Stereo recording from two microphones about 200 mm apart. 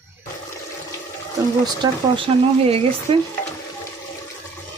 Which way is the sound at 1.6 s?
20° right (ahead or behind).